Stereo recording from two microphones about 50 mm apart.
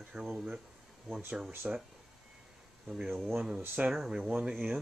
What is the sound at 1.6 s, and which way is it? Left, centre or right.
Speech, right.